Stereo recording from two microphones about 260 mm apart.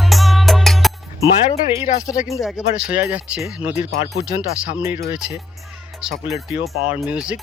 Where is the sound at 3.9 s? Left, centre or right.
Left.